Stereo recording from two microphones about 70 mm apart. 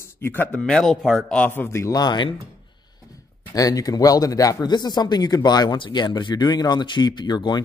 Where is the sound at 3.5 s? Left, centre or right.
Left.